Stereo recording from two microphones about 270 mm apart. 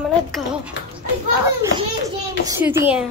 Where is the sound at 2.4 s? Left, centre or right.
Centre.